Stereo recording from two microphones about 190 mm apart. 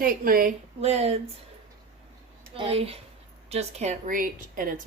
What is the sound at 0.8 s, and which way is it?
Speech, 35° right (ahead or behind).